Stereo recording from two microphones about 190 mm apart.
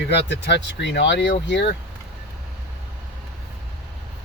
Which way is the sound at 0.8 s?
70° left (ahead or behind).